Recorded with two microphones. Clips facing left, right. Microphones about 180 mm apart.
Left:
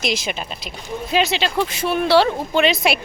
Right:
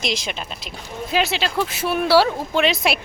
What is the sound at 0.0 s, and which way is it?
A woman's voice, 5° left (ahead or behind).